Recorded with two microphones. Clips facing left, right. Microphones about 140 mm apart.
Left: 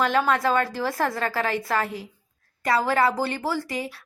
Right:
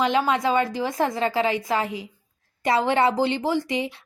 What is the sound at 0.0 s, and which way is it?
A woman's voice, 15° right (ahead or behind).